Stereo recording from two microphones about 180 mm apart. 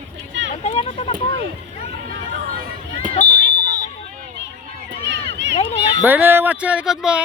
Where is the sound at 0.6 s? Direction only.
35° left (ahead or behind).